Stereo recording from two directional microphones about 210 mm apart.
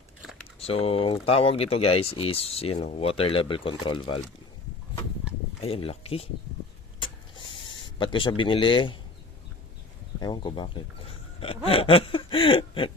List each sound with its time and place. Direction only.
0.6 s speech: 25° left (ahead or behind)
5.6 s speech: 25° left (ahead or behind)
7.9 s speech: 25° left (ahead or behind)
10.2 s speech: 20° left (ahead or behind)